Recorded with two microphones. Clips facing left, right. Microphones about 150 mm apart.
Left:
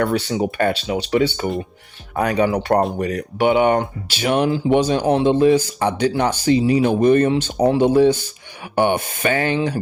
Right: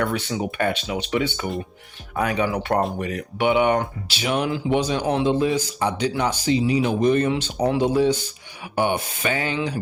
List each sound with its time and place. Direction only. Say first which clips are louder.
0.0 s speech: left 5 dB; 35° left (ahead or behind)
5.2 s speech: left 6 dB; 50° left (ahead or behind)
7.3 s speech: left 5 dB; 35° left (ahead or behind)
7.8 s speech: left 5 dB; 55° left (ahead or behind)